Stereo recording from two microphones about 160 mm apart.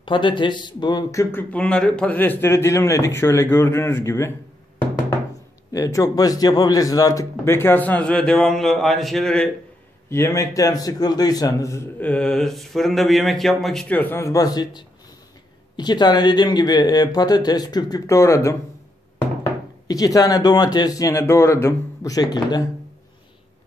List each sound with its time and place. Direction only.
0.0 s a man's voice: 30° left (ahead or behind)
5.7 s a man's voice: 20° left (ahead or behind); by 9.5 s 5° left (ahead or behind)
10.0 s a man's voice: 15° left (ahead or behind)
19.9 s a man's voice: 25° left (ahead or behind)